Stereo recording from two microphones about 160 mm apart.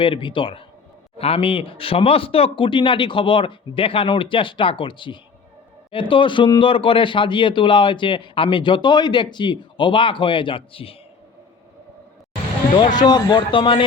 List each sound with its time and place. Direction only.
0.0 s speech: 30° left (ahead or behind)
12.7 s a man's voice: 30° left (ahead or behind)